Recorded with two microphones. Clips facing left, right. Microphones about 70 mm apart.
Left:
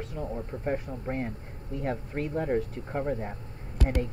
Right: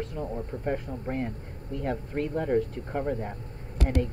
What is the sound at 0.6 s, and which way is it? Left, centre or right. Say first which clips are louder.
Speech: even; centre.